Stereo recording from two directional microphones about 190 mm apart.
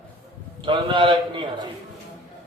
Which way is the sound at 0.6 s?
25° right (ahead or behind).